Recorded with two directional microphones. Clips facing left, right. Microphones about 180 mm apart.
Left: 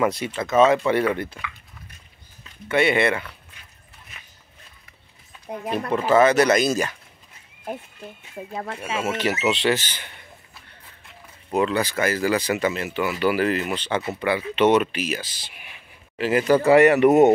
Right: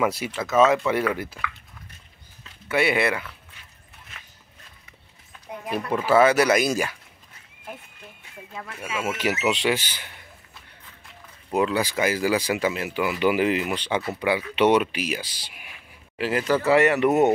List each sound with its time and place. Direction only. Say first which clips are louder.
0.0 s speech: left 2 dB; 5° right (ahead or behind)
2.7 s speech: left 2 dB; 5° right (ahead or behind)
5.7 s speech: left 1 dB; 10° right (ahead or behind)
8.5 s speech: left 3 dB; 30° left (ahead or behind)
9.0 s speech: left 1 dB; 10° right (ahead or behind)
11.5 s speech: left 1 dB; 10° right (ahead or behind)
16.2 s speech: left 4 dB; 5° left (ahead or behind)